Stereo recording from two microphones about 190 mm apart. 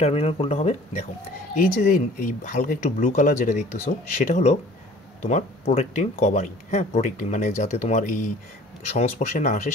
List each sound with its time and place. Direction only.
0.0 s speech: 35° left (ahead or behind)